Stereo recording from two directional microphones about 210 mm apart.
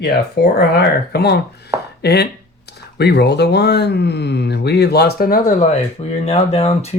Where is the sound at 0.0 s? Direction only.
50° left (ahead or behind).